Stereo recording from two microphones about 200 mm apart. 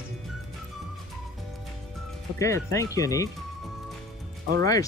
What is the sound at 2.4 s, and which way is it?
Speech, 15° left (ahead or behind).